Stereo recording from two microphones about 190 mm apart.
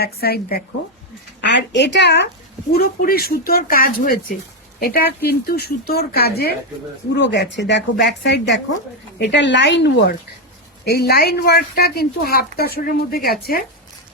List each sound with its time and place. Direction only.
0.0 s speech: 55° left (ahead or behind)
1.4 s speech: 65° left (ahead or behind)
2.7 s speech: 50° left (ahead or behind)
7.2 s speech: 65° left (ahead or behind)
10.8 s speech: 55° left (ahead or behind)